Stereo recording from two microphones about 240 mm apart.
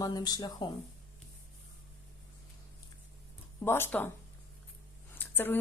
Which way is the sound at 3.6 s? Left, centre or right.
Centre.